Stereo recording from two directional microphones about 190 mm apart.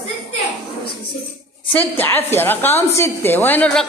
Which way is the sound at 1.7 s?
10° left (ahead or behind).